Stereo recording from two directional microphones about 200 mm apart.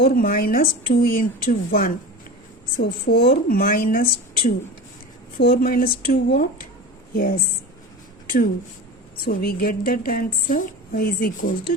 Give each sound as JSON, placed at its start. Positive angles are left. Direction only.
{"t": 0.0, "sound": "a woman's voice", "side_deg": 45}
{"t": 9.2, "sound": "a woman's voice", "side_deg": 45}